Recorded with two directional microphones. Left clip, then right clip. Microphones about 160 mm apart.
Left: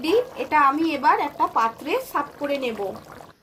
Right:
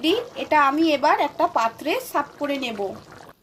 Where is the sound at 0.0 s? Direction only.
60° right (ahead or behind).